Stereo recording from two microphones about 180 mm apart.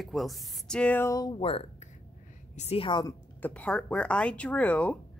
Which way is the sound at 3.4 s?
5° left (ahead or behind).